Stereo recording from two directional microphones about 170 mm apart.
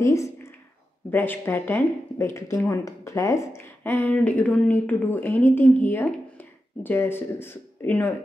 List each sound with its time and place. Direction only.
0.0 s speech: 20° left (ahead or behind)